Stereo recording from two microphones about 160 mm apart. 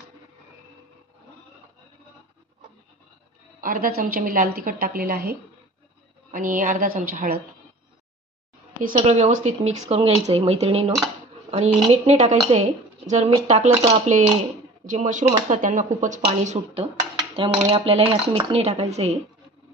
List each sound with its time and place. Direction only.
3.6 s a woman's voice: 60° right (ahead or behind)
6.3 s a woman's voice: 55° right (ahead or behind)
8.9 s speech: 45° right (ahead or behind)